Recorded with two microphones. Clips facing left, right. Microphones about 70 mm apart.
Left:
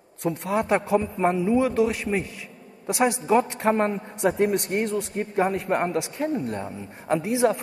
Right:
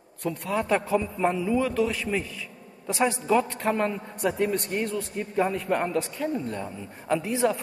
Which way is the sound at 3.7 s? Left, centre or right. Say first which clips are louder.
Left 4 dB; left.